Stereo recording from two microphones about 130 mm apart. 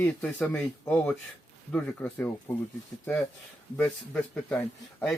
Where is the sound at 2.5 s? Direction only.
15° left (ahead or behind).